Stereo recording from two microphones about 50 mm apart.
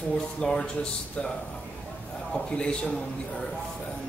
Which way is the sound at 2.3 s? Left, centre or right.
Centre.